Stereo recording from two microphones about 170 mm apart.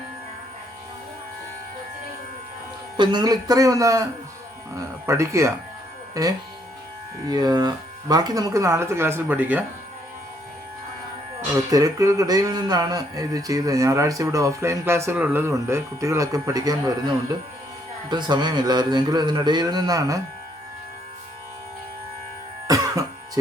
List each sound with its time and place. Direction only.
3.0 s speech: 25° right (ahead or behind); by 9.6 s 10° right (ahead or behind)
11.7 s speech: 20° right (ahead or behind)
18.1 s speech: 25° right (ahead or behind)
22.6 s throat clearing: 20° right (ahead or behind)